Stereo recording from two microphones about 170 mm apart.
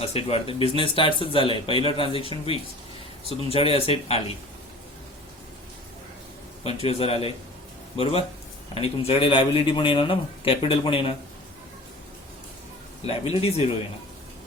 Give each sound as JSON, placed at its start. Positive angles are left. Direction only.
{"t": 0.0, "sound": "speech", "side_deg": 35}
{"t": 6.7, "sound": "speech", "side_deg": 35}
{"t": 13.1, "sound": "speech", "side_deg": 35}